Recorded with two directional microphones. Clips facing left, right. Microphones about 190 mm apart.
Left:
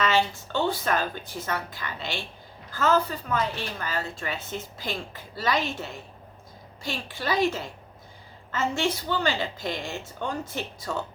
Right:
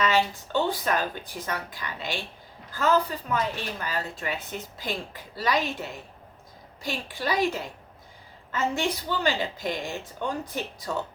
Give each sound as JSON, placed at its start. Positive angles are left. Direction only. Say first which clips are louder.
{"t": 0.0, "sound": "a woman's voice", "louder": "even", "side_deg": -15}